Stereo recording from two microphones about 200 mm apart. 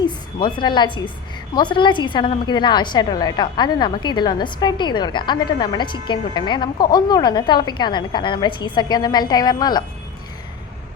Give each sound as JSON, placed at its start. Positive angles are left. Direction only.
{"t": 0.0, "sound": "a woman's voice", "side_deg": 20}